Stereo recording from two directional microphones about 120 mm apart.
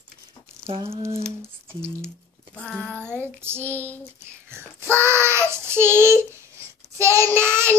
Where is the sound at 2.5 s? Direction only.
10° left (ahead or behind).